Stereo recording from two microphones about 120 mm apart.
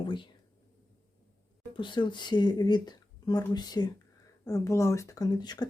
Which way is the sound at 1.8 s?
40° left (ahead or behind).